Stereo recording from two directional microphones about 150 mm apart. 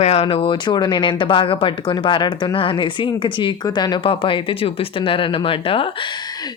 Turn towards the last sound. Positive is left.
turn(degrees=35)  # may be behind; listen again after turning